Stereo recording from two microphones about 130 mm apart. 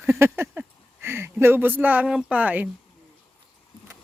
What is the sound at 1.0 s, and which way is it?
Speech, 20° right (ahead or behind).